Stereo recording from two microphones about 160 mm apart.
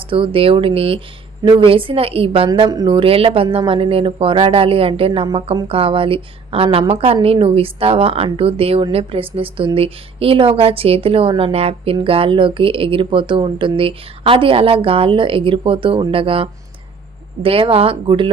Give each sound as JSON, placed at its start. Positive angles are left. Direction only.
{"t": 0.0, "sound": "speech", "side_deg": -35}
{"t": 2.5, "sound": "speech", "side_deg": -25}